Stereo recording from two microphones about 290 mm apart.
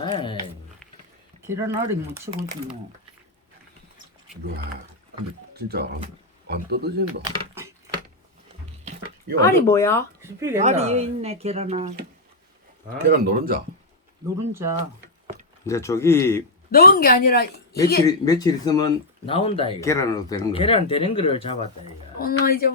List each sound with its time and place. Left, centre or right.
0.0 s a sound: centre
1.4 s speech: centre
5.5 s speech: right
7.3 s a sound: centre
8.8 s a sound: right
9.4 s speech: centre
10.2 s speech: centre
10.6 s speech: right
13.1 s speech: right
14.5 s speech: centre
15.6 s speech: centre
16.7 s a woman's voice: left
18.0 s speech: centre
22.2 s a woman's voice: left